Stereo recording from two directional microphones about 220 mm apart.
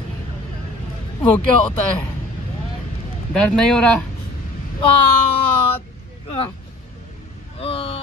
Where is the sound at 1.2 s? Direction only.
10° left (ahead or behind).